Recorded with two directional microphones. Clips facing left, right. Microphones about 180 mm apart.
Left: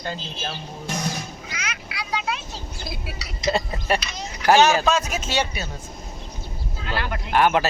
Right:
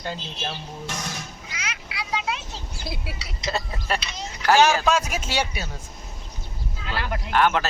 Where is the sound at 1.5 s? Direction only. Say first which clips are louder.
Even; 25° right (ahead or behind).